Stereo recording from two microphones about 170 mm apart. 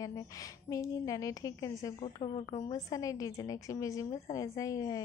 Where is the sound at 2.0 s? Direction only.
35° left (ahead or behind).